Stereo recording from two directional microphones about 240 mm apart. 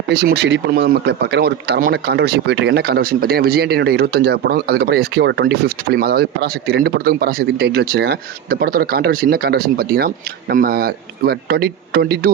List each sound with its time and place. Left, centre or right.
0.1 s speech: right